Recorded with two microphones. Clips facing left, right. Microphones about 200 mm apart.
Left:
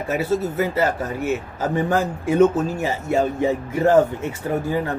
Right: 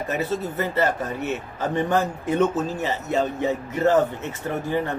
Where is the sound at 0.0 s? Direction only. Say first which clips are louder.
Left 4 dB; 10° left (ahead or behind).